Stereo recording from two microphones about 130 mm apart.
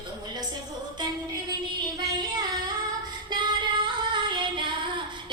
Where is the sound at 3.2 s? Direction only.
35° right (ahead or behind).